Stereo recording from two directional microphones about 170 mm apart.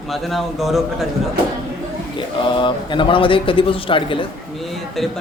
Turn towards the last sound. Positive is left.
turn(degrees=0)  # may be behind; listen again after turning